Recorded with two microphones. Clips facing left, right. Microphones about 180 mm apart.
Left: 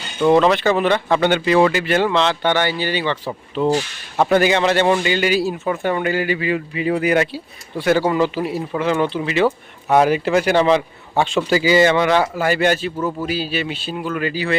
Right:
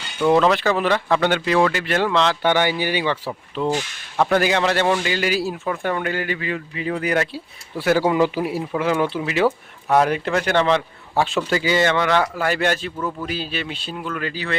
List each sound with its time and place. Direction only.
0.3 s a man's voice: centre (ahead or behind)
2.4 s a man's voice: 10° right (ahead or behind); by 7.4 s 5° left (ahead or behind)
7.8 s a man's voice: 5° right (ahead or behind)
11.1 s speech: centre (ahead or behind); by 12.3 s 15° left (ahead or behind)
12.4 s a man's voice: 5° left (ahead or behind)
13.0 s speech: 25° left (ahead or behind)
13.2 s a man's voice: 5° left (ahead or behind)